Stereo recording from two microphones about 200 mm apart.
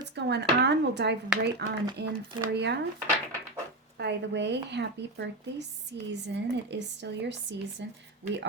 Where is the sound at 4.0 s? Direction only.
60° right (ahead or behind).